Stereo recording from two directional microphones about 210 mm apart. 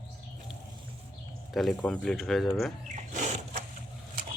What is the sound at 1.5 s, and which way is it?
Speech, 5° left (ahead or behind).